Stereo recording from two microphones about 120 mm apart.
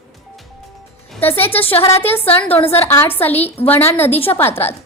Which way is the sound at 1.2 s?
15° left (ahead or behind).